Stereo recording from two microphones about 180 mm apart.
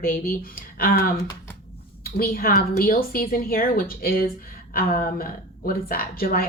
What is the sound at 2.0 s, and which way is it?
A woman's voice, 55° left (ahead or behind).